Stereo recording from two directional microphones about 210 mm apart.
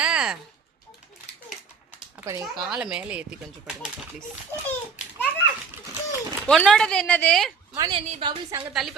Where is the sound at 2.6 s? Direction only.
5° right (ahead or behind).